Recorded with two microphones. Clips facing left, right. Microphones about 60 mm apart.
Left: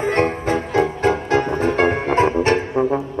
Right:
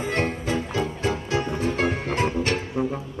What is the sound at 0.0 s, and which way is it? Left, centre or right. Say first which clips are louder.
Music: left 7 dB; left.